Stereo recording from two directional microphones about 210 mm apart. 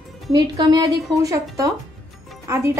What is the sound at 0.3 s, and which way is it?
A woman's voice, 20° right (ahead or behind).